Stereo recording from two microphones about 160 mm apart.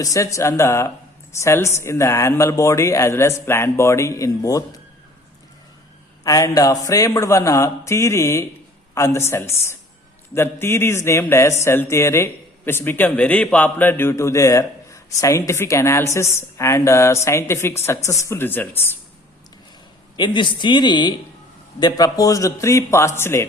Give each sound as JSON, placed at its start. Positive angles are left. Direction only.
{"t": 0.0, "sound": "speech", "side_deg": 20}
{"t": 6.2, "sound": "speech", "side_deg": 20}
{"t": 20.1, "sound": "speech", "side_deg": 30}